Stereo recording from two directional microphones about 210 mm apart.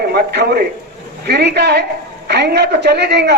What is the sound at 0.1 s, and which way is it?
A man's voice, 50° right (ahead or behind).